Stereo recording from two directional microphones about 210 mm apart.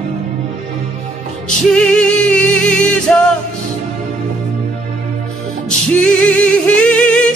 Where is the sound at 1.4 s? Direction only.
5° left (ahead or behind).